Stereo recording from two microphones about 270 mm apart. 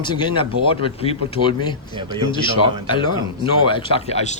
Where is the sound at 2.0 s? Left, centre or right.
Centre.